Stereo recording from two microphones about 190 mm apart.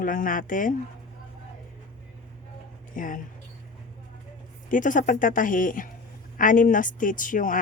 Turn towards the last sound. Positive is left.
turn(degrees=45)  # may be behind; listen again after turning